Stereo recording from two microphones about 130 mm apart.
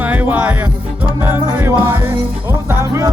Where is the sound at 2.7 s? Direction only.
20° right (ahead or behind).